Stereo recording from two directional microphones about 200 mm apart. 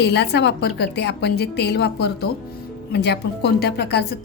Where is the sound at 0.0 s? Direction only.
55° left (ahead or behind).